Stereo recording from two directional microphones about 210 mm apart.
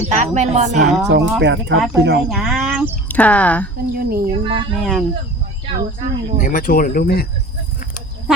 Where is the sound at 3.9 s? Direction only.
45° right (ahead or behind).